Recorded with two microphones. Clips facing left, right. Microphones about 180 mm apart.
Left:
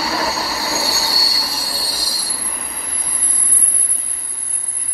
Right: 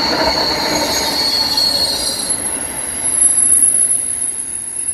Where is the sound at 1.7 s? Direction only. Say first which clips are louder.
Right 6 dB; 45° right (ahead or behind).